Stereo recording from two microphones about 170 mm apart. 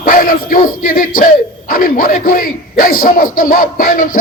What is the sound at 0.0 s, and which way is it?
A man's voice, 55° left (ahead or behind).